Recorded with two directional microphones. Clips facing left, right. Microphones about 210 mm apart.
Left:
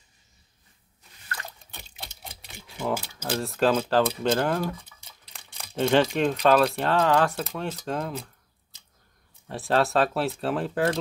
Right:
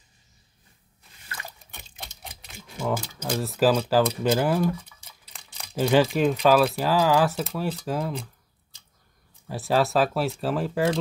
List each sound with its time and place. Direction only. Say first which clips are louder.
2.8 s speech: right 1 dB; centre (ahead or behind)
9.5 s speech: right 1 dB; centre (ahead or behind)